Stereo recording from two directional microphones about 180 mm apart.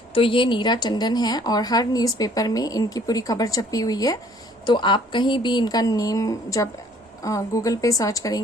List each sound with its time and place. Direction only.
0.1 s a woman's voice: 30° left (ahead or behind)